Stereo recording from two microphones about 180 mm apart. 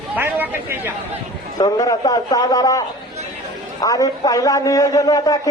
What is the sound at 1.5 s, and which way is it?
A man's voice, 20° left (ahead or behind).